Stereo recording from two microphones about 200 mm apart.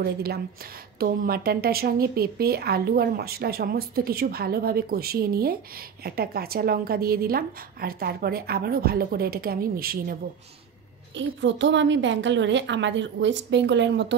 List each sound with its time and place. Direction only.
0.0 s a woman's voice: 50° right (ahead or behind)
11.1 s a woman's voice: 65° right (ahead or behind)